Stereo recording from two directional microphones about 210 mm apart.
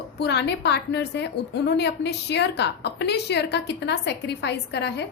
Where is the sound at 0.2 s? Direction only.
55° left (ahead or behind).